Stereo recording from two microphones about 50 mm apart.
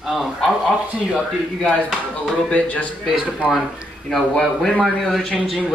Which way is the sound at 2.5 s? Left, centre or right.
Left.